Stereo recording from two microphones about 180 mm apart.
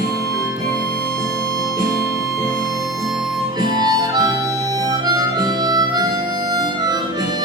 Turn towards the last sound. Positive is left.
turn(degrees=-20)  # may be behind; listen again after turning